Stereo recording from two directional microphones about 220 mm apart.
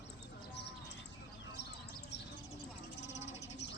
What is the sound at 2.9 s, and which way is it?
Vehicle, 50° left (ahead or behind).